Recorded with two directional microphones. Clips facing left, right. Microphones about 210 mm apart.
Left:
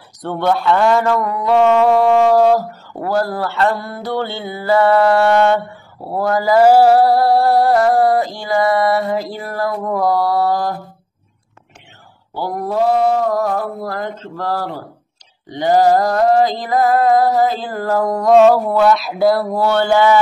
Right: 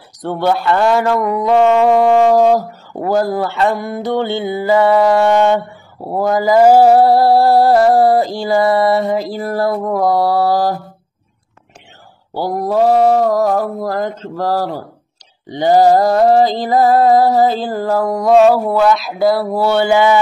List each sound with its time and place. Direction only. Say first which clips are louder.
0.2 s speech: right 1 dB; 10° right (ahead or behind)
9.3 s mantra: right 5 dB; 35° right (ahead or behind)
9.8 s speech: right 2 dB; 10° right (ahead or behind)
10.0 s mantra: right 2 dB; 25° right (ahead or behind)
12.4 s mantra: right 4 dB; 35° right (ahead or behind)
15.6 s music: right 3 dB; 30° right (ahead or behind)
17.8 s speech: even; 10° right (ahead or behind)